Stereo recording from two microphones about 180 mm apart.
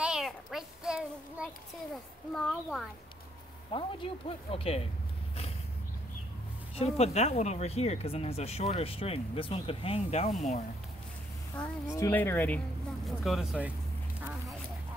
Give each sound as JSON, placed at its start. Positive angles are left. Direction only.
{"t": 0.0, "sound": "child singing", "side_deg": -5}
{"t": 2.3, "sound": "speech", "side_deg": 5}
{"t": 3.7, "sound": "speech", "side_deg": 30}
{"t": 6.7, "sound": "speech", "side_deg": 35}
{"t": 11.5, "sound": "speech", "side_deg": 10}